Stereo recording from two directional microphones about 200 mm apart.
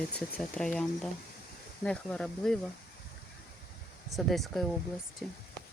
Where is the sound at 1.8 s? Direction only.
5° left (ahead or behind).